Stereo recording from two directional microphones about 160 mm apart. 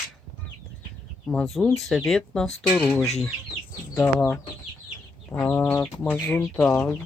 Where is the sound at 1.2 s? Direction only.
Centre (ahead or behind).